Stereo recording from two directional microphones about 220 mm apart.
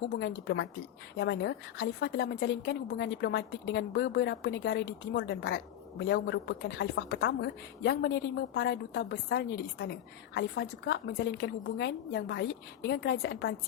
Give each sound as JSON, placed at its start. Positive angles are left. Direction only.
{"t": 0.2, "sound": "a woman's voice", "side_deg": 50}